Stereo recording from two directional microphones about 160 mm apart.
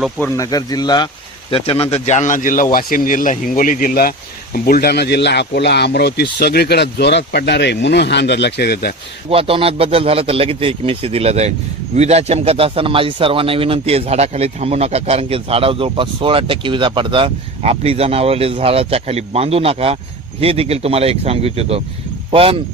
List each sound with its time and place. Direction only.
0.4 s speech: 25° left (ahead or behind); by 4.1 s 65° left (ahead or behind)
4.6 s speech: 75° left (ahead or behind)
9.3 s a man's voice: 35° right (ahead or behind)